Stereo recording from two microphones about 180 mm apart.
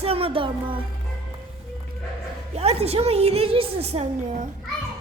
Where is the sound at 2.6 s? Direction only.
35° right (ahead or behind).